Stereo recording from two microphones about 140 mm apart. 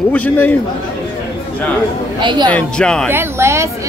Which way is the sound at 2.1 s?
35° right (ahead or behind).